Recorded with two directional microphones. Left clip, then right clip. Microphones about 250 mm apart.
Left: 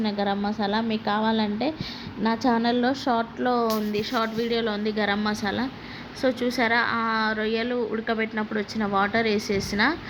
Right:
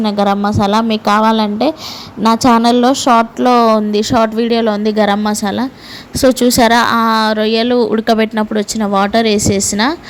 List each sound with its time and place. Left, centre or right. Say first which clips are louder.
0.0 s speech: right 13 dB; right